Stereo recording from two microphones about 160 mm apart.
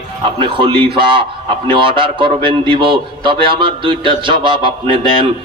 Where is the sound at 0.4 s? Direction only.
30° right (ahead or behind).